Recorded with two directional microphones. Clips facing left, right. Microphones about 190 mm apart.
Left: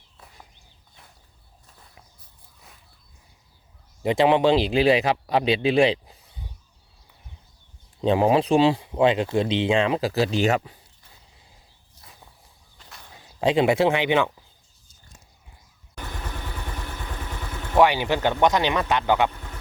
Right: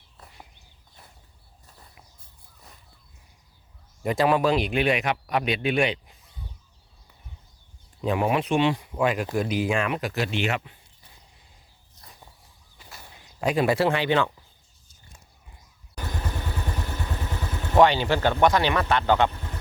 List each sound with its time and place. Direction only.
4.0 s speech: 25° left (ahead or behind)
8.0 s speech: 30° left (ahead or behind)
12.7 s a sound: 5° right (ahead or behind)
13.4 s speech: 25° left (ahead or behind)
17.7 s speech: 15° left (ahead or behind)